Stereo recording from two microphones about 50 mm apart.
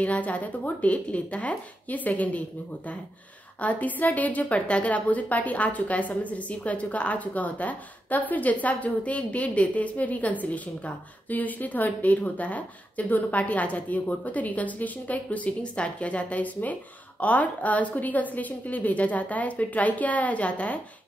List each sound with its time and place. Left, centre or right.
0.0 s speech: left
3.6 s a woman's voice: left